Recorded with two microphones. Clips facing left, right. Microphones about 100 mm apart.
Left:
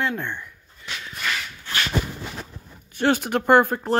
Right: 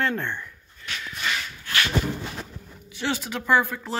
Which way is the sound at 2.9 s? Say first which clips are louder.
Left 8 dB; 50° left (ahead or behind).